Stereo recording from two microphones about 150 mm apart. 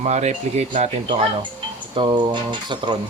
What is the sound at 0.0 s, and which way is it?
Speech, 50° right (ahead or behind).